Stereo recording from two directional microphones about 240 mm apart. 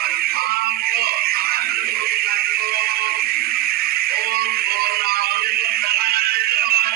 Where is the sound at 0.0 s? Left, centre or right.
Right.